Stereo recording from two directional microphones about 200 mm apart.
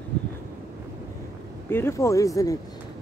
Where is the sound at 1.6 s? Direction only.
10° left (ahead or behind).